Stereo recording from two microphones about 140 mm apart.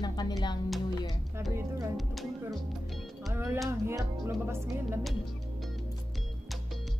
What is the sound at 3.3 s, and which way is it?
Music, 15° right (ahead or behind).